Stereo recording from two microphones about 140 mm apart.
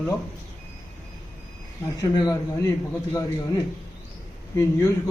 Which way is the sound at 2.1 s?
30° left (ahead or behind).